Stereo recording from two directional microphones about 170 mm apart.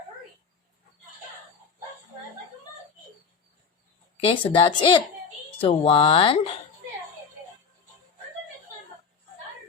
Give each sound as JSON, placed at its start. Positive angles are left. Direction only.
{"t": 4.2, "sound": "a woman's voice", "side_deg": 30}